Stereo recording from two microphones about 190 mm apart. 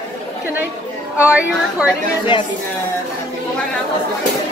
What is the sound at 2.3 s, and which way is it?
Speech, 25° left (ahead or behind).